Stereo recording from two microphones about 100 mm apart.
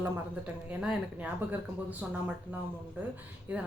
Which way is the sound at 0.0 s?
15° right (ahead or behind).